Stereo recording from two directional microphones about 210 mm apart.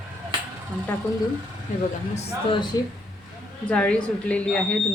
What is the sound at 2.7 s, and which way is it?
Speech, 20° left (ahead or behind).